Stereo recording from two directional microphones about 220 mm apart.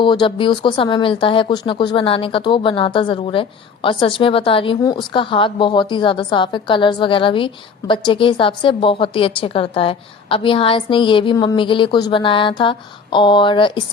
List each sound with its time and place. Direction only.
0.0 s speech: 20° left (ahead or behind)